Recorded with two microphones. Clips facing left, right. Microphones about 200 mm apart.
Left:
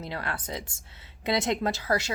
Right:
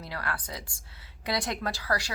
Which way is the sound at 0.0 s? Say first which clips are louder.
Left 2 dB; 25° left (ahead or behind).